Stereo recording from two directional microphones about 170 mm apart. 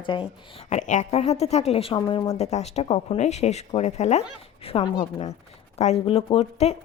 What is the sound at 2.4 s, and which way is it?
Speech, 40° left (ahead or behind).